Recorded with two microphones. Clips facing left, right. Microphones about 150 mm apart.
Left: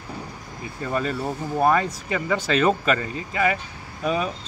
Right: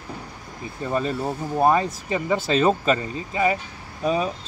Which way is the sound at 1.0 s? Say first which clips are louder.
Right 1 dB; 25° right (ahead or behind).